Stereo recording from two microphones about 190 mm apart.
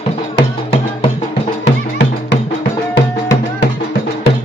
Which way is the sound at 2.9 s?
65° left (ahead or behind).